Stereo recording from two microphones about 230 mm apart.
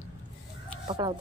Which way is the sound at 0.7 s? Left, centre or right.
Centre.